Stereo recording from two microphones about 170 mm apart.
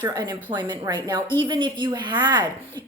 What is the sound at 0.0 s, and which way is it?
Speech, 20° right (ahead or behind).